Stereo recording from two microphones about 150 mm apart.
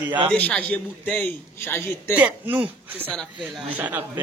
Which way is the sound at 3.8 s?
10° right (ahead or behind).